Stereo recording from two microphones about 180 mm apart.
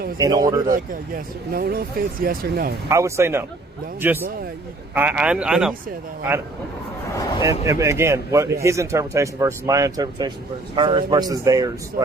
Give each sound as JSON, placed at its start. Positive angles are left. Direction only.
{"t": 0.2, "sound": "speech", "side_deg": -20}
{"t": 0.7, "sound": "speech", "side_deg": -55}
{"t": 2.9, "sound": "a man's voice", "side_deg": -15}
{"t": 7.4, "sound": "a man's voice", "side_deg": -15}